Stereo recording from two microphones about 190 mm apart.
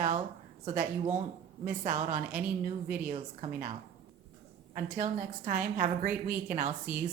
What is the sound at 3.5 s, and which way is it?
Speech, 40° right (ahead or behind).